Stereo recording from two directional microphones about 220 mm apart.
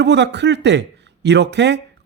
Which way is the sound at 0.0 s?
50° right (ahead or behind).